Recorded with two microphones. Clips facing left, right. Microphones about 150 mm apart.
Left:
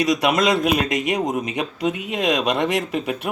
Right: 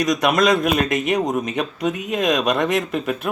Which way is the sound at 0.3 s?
20° left (ahead or behind).